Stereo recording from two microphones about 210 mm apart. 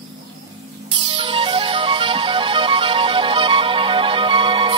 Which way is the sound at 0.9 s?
25° right (ahead or behind).